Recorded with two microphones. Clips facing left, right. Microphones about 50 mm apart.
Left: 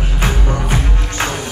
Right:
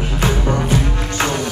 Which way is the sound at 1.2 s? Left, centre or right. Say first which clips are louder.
Right 3 dB; centre.